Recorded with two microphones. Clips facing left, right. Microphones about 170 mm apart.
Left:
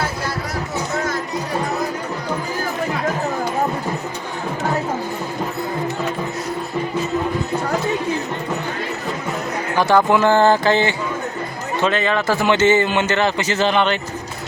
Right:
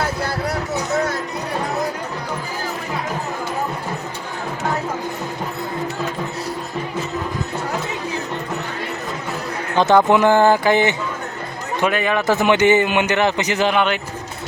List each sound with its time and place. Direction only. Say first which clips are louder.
9.7 s a man's voice: right 2 dB; 20° right (ahead or behind)